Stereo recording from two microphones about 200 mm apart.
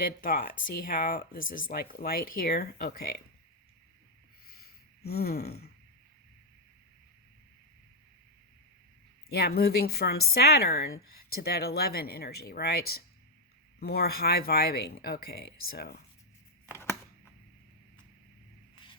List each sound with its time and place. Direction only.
0.0 s speech: 45° left (ahead or behind)
4.4 s a sound: 50° left (ahead or behind)
9.3 s speech: 50° left (ahead or behind)